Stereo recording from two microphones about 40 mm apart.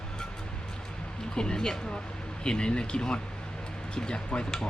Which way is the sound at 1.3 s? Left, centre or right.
Centre.